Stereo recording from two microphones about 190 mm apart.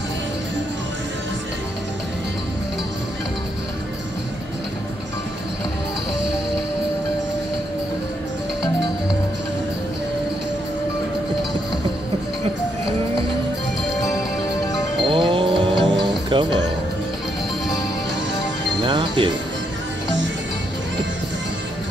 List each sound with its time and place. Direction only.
15.0 s music: 25° right (ahead or behind)
18.8 s music: 25° right (ahead or behind)